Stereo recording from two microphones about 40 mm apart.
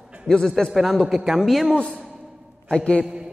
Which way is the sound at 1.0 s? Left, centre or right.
Centre.